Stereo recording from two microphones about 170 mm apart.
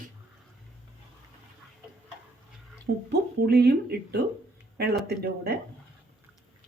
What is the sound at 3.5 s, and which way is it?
Speech, 70° right (ahead or behind).